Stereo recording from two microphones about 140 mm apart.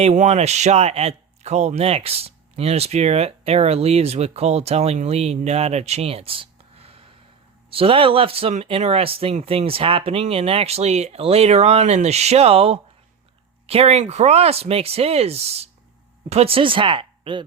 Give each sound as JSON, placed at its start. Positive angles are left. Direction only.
{"t": 0.0, "sound": "speech", "side_deg": -55}